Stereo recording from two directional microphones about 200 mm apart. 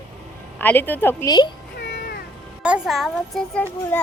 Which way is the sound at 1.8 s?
50° left (ahead or behind).